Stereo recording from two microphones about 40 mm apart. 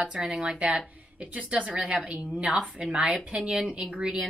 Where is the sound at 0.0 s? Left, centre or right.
Centre.